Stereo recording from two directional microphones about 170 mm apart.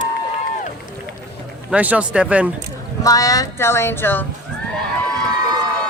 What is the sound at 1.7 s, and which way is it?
Speech, 10° right (ahead or behind).